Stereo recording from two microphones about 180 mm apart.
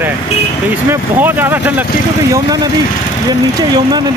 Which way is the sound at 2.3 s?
20° right (ahead or behind).